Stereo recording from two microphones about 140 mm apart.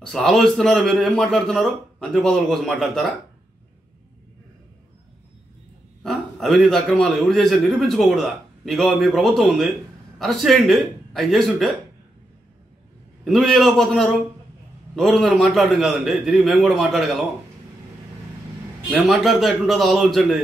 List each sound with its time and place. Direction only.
0.0 s a man's voice: 5° left (ahead or behind)
6.0 s a man's voice: centre (ahead or behind)
13.2 s a man's voice: centre (ahead or behind)
18.9 s a man's voice: centre (ahead or behind)